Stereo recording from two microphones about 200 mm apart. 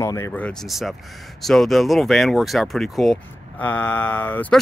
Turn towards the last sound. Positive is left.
turn(degrees=5)  # may be behind; listen again after turning